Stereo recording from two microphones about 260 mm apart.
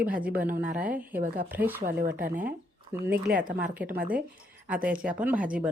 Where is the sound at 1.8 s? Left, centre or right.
Right.